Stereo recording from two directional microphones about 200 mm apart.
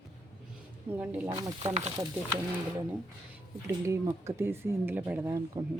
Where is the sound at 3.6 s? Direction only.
15° right (ahead or behind).